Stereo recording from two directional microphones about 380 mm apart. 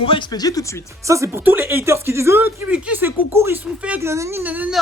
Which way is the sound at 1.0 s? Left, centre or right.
Centre.